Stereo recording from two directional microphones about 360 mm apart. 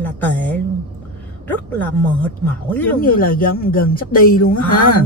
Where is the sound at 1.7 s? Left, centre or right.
Centre.